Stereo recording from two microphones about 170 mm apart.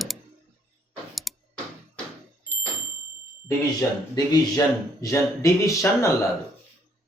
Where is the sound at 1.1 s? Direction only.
Centre (ahead or behind).